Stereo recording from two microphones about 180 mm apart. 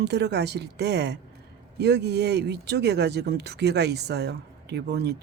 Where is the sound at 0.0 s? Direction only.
70° right (ahead or behind).